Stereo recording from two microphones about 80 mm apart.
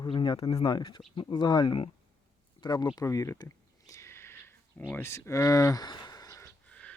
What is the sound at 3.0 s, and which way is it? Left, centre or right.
Speech, left.